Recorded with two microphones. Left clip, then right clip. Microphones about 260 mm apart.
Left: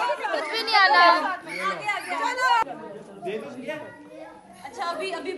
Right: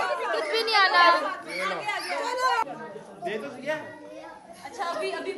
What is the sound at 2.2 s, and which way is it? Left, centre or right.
Chatter, left.